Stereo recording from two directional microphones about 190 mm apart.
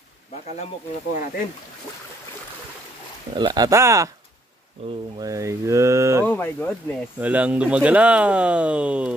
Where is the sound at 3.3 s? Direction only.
25° right (ahead or behind).